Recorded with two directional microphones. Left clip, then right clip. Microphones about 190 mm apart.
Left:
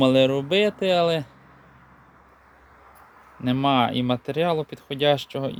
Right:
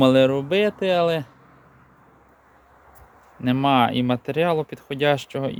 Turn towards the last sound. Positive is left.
turn(degrees=-10)  # may be behind; listen again after turning